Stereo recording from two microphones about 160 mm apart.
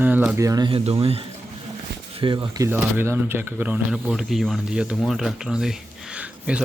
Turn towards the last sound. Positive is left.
turn(degrees=-5)  # may be behind; listen again after turning